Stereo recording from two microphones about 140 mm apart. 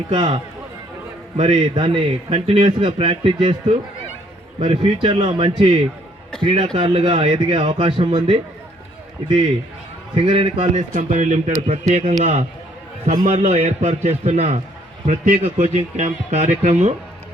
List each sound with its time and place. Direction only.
0.1 s a man's voice: 35° right (ahead or behind)
1.4 s a man's voice: 40° right (ahead or behind)
10.2 s a man's voice: 40° right (ahead or behind)
10.8 s a man's voice: 60° right (ahead or behind)
16.0 s speech: 55° right (ahead or behind)